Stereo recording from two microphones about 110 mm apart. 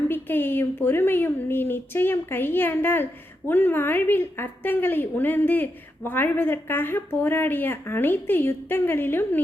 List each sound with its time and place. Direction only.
0.1 s a woman's voice: 20° left (ahead or behind)